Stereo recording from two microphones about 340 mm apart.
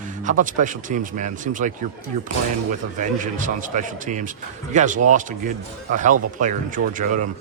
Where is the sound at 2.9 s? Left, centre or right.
Right.